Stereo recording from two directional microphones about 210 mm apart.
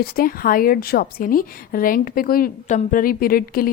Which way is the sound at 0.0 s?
45° left (ahead or behind).